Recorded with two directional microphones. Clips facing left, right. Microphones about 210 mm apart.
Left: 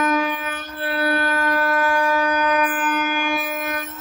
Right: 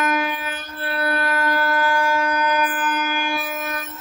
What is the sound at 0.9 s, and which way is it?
Shofar, 25° left (ahead or behind).